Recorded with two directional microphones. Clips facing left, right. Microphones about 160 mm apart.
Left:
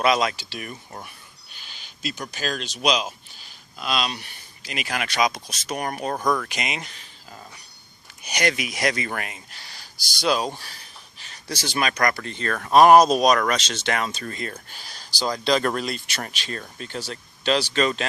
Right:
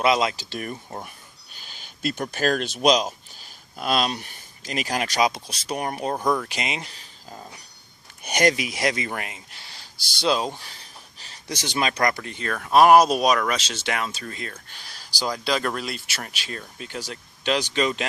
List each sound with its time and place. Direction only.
0.0 s speech: 25° right (ahead or behind)
0.3 s speech: 40° right (ahead or behind)
8.2 s speech: 50° right (ahead or behind)
8.5 s speech: 30° right (ahead or behind)
11.4 s speech: 20° right (ahead or behind)